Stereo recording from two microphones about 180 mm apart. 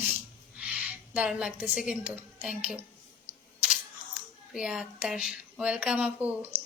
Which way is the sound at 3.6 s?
10° right (ahead or behind).